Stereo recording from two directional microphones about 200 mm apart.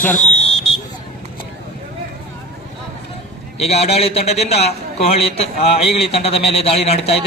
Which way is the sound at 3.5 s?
30° left (ahead or behind).